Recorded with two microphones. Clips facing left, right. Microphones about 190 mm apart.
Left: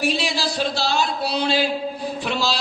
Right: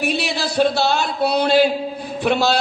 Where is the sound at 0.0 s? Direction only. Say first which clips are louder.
Right 1 dB; 60° right (ahead or behind).